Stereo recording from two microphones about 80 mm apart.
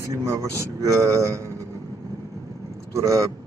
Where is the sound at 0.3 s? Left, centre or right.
Right.